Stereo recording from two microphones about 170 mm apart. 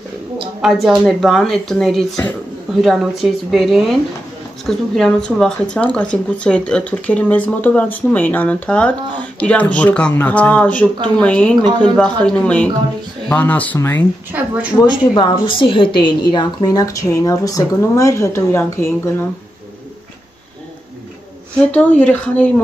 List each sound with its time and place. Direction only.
0.6 s speech: centre (ahead or behind)
14.3 s speech: 10° right (ahead or behind)
14.8 s a woman's voice: 25° left (ahead or behind)
21.7 s speech: 10° left (ahead or behind)